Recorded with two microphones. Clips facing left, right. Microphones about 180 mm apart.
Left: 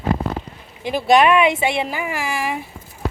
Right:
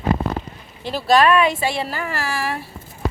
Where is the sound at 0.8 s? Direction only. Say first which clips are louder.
Left 1 dB; 15° left (ahead or behind).